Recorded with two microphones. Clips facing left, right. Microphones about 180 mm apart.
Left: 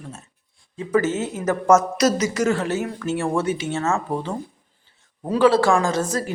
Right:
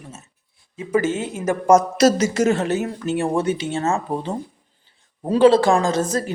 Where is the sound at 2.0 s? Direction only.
30° right (ahead or behind).